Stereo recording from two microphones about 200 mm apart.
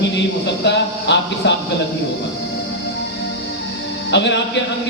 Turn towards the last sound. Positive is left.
turn(degrees=60)  # may be behind; listen again after turning